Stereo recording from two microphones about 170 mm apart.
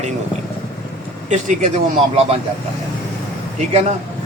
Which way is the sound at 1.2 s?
45° right (ahead or behind).